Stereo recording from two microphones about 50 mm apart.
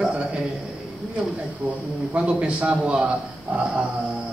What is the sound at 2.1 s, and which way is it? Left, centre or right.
Speech, right.